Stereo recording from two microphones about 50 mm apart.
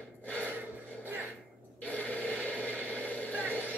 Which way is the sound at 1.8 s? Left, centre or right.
Left.